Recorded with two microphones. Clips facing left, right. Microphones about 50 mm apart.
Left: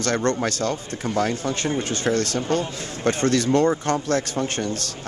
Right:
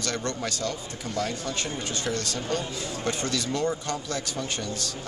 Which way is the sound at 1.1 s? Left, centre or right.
Left.